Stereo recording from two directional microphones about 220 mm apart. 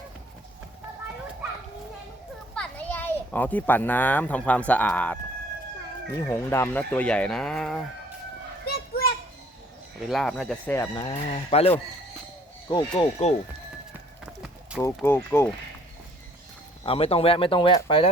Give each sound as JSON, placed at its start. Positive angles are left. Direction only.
{"t": 2.6, "sound": "a child's voice", "side_deg": 5}
{"t": 6.2, "sound": "speech", "side_deg": 10}
{"t": 8.6, "sound": "children playing", "side_deg": 45}
{"t": 10.1, "sound": "speech", "side_deg": 0}
{"t": 11.1, "sound": "speech", "side_deg": 25}
{"t": 12.7, "sound": "speech", "side_deg": 20}
{"t": 14.3, "sound": "a sound", "side_deg": -5}
{"t": 14.8, "sound": "speech", "side_deg": 10}
{"t": 16.8, "sound": "speech", "side_deg": 25}